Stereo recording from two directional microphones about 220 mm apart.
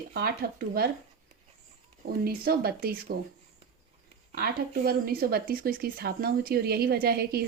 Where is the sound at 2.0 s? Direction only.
45° right (ahead or behind).